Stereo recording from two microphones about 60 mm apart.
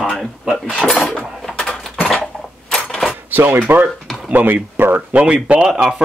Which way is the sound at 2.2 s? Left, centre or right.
Centre.